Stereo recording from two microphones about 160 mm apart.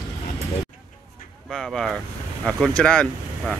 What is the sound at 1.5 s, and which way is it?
Vehicle, centre (ahead or behind).